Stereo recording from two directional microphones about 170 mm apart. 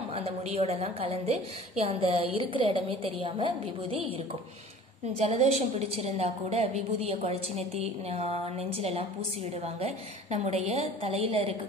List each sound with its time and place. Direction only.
0.1 s a woman's voice: 35° right (ahead or behind)
5.2 s a woman's voice: 40° right (ahead or behind)